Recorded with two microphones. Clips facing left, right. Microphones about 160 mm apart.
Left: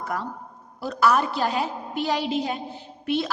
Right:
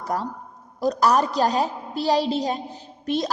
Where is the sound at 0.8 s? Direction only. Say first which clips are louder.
Right 2 dB; 40° right (ahead or behind).